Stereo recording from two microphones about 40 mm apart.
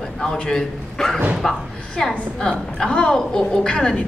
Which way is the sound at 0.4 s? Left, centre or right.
Centre.